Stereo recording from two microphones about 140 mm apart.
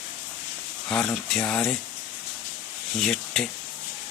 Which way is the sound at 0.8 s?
5° left (ahead or behind).